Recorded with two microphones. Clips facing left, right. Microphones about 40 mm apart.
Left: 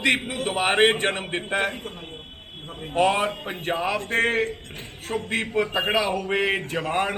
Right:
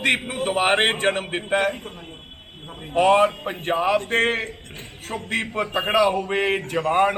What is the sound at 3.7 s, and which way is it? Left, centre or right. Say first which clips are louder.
Speech: right 5 dB; right.